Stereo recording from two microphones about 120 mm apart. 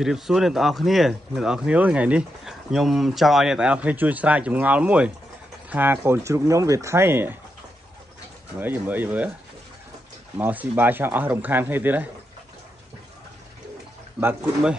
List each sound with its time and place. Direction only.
0.0 s speech: 5° right (ahead or behind); by 7.3 s 20° right (ahead or behind)
8.5 s speech: 15° right (ahead or behind)
10.3 s speech: 15° right (ahead or behind)